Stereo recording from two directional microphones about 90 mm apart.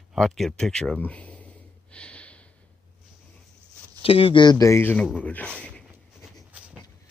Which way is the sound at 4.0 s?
90° left.